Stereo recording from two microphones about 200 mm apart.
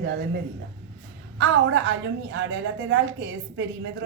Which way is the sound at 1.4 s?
75° right (ahead or behind).